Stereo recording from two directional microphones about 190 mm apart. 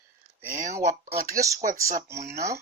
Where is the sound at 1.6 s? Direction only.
50° right (ahead or behind).